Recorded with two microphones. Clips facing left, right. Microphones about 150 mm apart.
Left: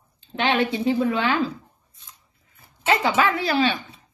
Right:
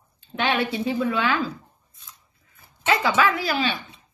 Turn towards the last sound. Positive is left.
turn(degrees=35)  # may be behind; listen again after turning